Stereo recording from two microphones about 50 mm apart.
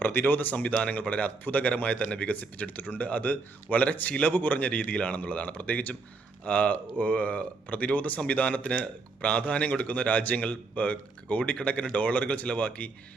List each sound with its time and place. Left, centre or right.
0.0 s speech: left
0.5 s a man's voice: left